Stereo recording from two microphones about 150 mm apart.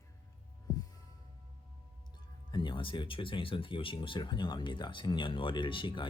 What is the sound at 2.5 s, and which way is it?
Speech, 35° left (ahead or behind).